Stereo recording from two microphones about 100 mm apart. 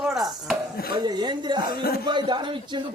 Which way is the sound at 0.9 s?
45° right (ahead or behind).